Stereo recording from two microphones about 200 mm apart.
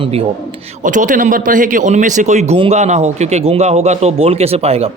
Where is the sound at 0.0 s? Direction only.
30° right (ahead or behind).